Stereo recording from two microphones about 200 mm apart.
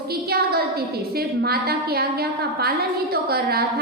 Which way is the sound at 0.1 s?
50° right (ahead or behind).